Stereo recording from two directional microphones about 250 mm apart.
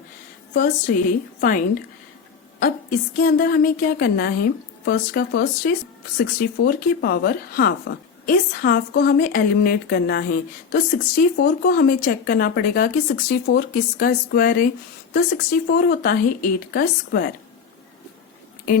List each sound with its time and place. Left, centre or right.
0.5 s a woman's voice: left
3.2 s a woman's voice: left